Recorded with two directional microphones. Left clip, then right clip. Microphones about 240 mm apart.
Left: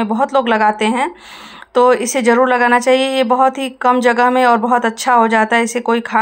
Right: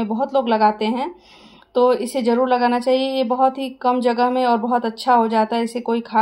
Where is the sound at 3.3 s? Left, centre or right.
Centre.